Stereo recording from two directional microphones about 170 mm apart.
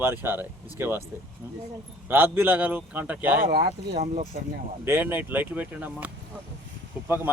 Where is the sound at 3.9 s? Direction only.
40° right (ahead or behind).